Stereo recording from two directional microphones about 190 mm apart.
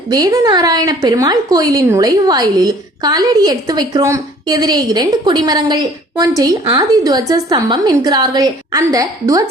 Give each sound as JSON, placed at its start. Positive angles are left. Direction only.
{"t": 0.1, "sound": "a woman's voice", "side_deg": -20}